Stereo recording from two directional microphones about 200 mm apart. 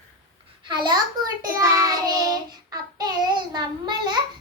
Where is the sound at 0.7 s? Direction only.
25° right (ahead or behind).